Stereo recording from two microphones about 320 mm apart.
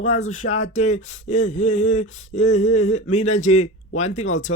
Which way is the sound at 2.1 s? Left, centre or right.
Left.